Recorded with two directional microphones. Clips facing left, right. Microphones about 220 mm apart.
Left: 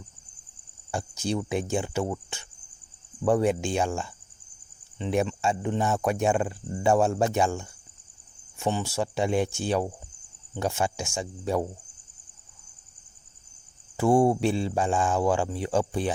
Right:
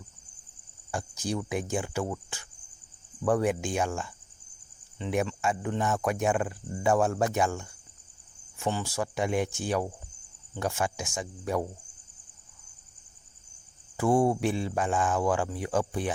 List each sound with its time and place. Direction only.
0.9 s speech: 25° left (ahead or behind)
13.9 s speech: 25° left (ahead or behind)